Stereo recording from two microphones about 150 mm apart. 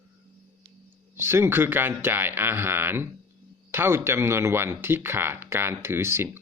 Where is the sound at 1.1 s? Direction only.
15° right (ahead or behind).